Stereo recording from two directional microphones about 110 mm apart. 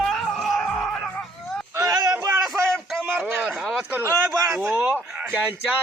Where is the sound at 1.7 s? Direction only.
30° right (ahead or behind).